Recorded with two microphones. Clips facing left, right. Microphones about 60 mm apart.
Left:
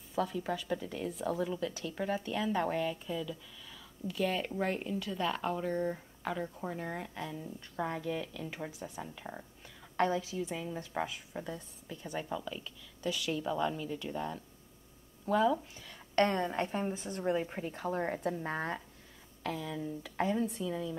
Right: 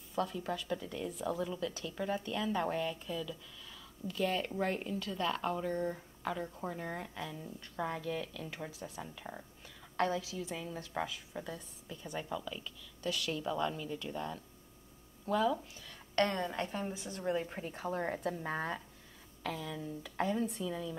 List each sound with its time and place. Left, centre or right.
0.1 s a woman's voice: centre
9.9 s a woman's voice: centre
16.2 s a woman's voice: left
17.2 s a woman's voice: centre